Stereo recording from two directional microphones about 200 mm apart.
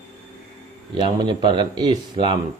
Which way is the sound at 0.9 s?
25° right (ahead or behind).